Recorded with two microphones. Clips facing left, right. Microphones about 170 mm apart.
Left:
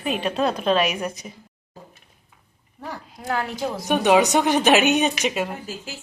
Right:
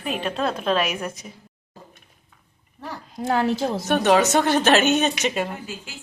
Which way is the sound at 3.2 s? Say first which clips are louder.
Right 5 dB; 30° right (ahead or behind).